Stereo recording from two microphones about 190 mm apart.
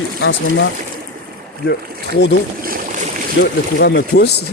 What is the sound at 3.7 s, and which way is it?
Speech, 60° left (ahead or behind).